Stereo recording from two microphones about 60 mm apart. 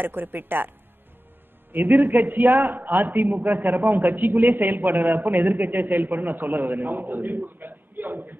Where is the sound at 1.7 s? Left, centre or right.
Right.